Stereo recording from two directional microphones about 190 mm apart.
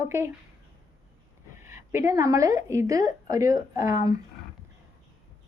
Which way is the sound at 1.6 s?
15° right (ahead or behind).